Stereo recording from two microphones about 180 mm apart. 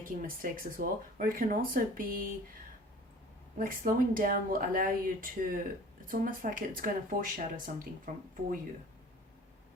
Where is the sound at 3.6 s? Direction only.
50° right (ahead or behind).